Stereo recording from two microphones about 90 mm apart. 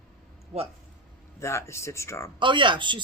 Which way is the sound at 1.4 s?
30° left (ahead or behind).